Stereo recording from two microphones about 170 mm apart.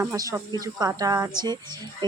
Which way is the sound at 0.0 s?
20° right (ahead or behind).